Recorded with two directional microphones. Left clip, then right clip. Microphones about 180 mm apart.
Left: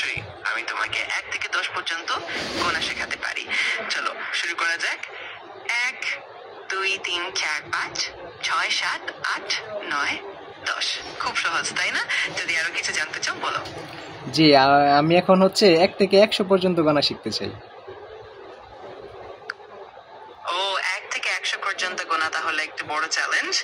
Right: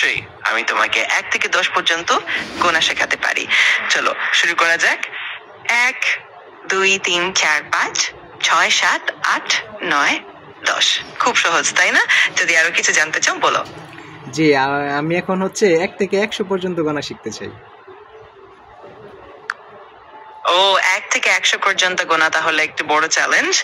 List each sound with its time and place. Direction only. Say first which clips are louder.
0.0 s a woman's voice: right 9 dB; 50° right (ahead or behind)
14.4 s speech: even; 15° left (ahead or behind)
20.4 s a woman's voice: right 11 dB; 50° right (ahead or behind)